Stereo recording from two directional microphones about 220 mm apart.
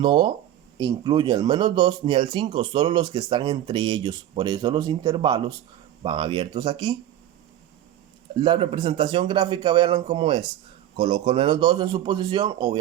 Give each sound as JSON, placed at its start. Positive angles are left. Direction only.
{"t": 0.0, "sound": "speech", "side_deg": -20}
{"t": 8.4, "sound": "speech", "side_deg": -20}